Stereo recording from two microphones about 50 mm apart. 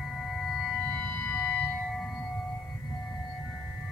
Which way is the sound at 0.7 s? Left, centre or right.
Centre.